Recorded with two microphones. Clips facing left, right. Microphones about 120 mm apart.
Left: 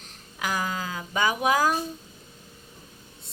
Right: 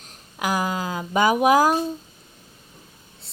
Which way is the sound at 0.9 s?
40° right (ahead or behind).